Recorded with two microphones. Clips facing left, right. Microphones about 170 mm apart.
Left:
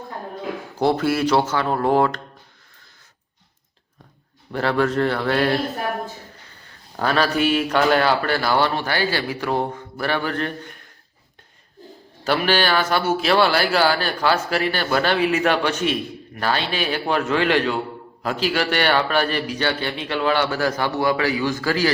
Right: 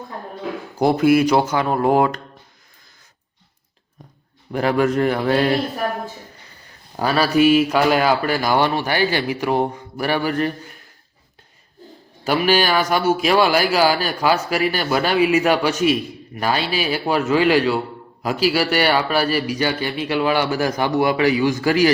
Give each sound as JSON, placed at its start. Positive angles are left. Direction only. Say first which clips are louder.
{"t": 0.8, "sound": "speech", "louder": "right 5 dB", "side_deg": -15}
{"t": 4.5, "sound": "speech", "louder": "right 2 dB", "side_deg": -15}
{"t": 6.9, "sound": "speech", "louder": "right 3 dB", "side_deg": -10}
{"t": 12.2, "sound": "speech", "louder": "right 2 dB", "side_deg": -10}